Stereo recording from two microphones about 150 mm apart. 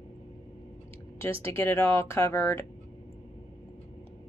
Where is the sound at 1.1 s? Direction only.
15° left (ahead or behind).